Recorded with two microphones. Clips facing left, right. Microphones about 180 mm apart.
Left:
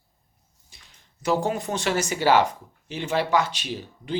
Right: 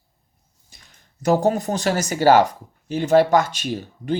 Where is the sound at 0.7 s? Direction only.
45° right (ahead or behind).